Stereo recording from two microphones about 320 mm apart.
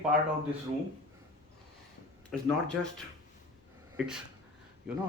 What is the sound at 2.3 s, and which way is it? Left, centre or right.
Speech, centre.